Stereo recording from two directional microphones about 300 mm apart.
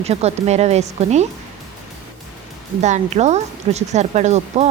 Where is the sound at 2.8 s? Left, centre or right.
Right.